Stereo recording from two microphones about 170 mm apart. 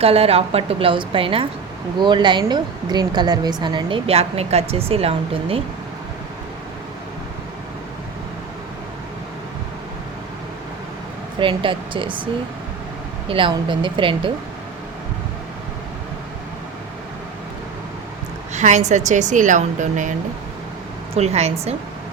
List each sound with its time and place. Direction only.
0.0 s a woman's voice: 35° right (ahead or behind)
11.3 s a woman's voice: 30° right (ahead or behind)
18.5 s a woman's voice: 45° right (ahead or behind)